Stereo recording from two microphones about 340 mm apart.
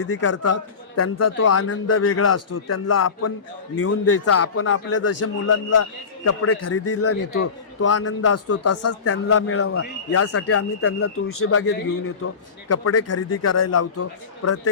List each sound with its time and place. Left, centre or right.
0.0 s a man's voice: left